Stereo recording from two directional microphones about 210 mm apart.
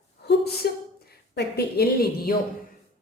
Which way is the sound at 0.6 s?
50° left (ahead or behind).